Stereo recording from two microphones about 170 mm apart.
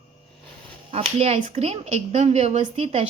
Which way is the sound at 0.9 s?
35° right (ahead or behind).